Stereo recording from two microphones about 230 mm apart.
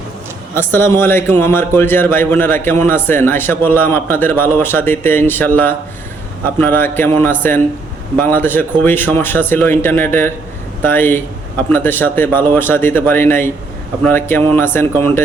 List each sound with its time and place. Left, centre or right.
0.5 s a man's voice: centre